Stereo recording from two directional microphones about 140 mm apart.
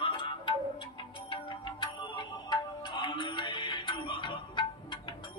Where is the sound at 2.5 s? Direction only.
35° left (ahead or behind).